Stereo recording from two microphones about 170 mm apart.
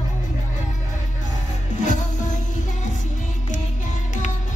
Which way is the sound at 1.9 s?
45° left (ahead or behind).